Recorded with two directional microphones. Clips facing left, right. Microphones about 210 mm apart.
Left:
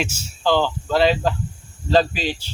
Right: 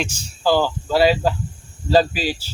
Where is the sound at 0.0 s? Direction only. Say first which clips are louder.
Even; 5° left (ahead or behind).